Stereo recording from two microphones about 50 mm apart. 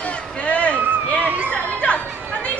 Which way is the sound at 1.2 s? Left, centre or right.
Right.